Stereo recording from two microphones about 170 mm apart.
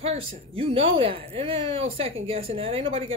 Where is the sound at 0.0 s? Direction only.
35° right (ahead or behind).